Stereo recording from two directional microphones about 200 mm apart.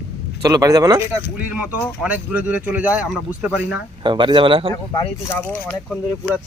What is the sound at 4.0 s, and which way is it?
Speech, 25° right (ahead or behind).